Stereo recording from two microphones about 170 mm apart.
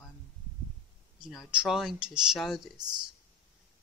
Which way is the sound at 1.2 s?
Centre (ahead or behind).